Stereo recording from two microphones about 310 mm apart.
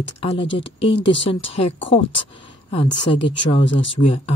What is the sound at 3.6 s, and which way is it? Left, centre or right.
Speech, left.